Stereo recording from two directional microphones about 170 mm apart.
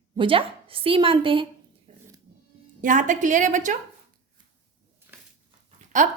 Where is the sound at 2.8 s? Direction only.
50° right (ahead or behind).